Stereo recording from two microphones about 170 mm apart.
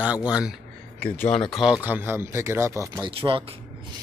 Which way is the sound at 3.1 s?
30° right (ahead or behind).